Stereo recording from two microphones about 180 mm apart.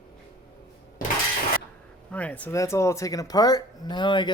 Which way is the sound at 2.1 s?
10° left (ahead or behind).